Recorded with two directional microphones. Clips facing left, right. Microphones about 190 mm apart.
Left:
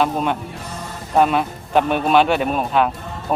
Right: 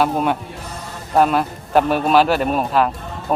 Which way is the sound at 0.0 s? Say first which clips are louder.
Right 1 dB; 5° right (ahead or behind).